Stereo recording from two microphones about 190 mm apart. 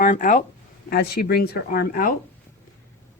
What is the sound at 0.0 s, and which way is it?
Speech, 45° left (ahead or behind).